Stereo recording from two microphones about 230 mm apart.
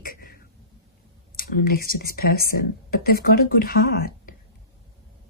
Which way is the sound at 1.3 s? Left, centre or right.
Left.